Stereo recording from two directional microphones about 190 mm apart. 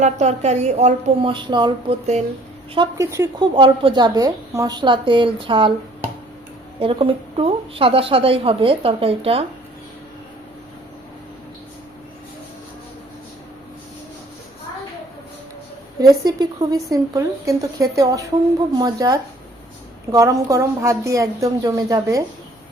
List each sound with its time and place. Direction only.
0.0 s a woman's voice: 35° right (ahead or behind)
16.0 s speech: 20° right (ahead or behind)